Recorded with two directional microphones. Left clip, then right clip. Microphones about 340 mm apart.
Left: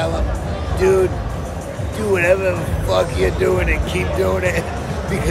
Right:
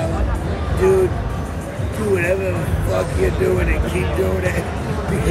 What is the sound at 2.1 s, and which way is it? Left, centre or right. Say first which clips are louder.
Speech: left 4 dB; left.